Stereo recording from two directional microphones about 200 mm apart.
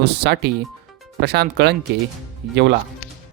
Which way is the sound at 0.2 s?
55° right (ahead or behind).